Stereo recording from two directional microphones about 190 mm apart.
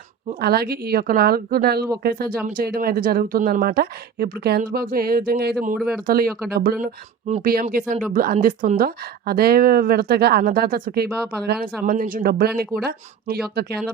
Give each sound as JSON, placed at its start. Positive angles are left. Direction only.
{"t": 0.3, "sound": "a woman's voice", "side_deg": -55}
{"t": 5.7, "sound": "speech", "side_deg": 0}
{"t": 6.5, "sound": "speech", "side_deg": -55}
{"t": 6.8, "sound": "a woman's voice", "side_deg": -40}